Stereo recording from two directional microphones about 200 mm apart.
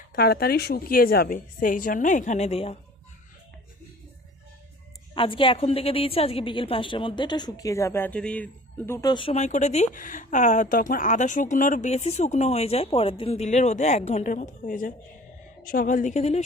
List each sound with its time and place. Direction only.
0.1 s a woman's voice: 50° left (ahead or behind); by 2.7 s 30° left (ahead or behind)
5.1 s a woman's voice: 25° left (ahead or behind); by 8.4 s 5° left (ahead or behind)
8.9 s speech: 20° left (ahead or behind); by 16.4 s 35° left (ahead or behind)